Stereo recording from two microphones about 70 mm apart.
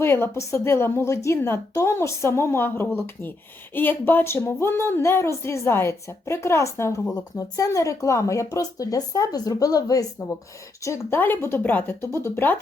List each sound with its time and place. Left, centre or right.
0.0 s a woman's voice: left
10.8 s speech: left
11.2 s a woman's voice: left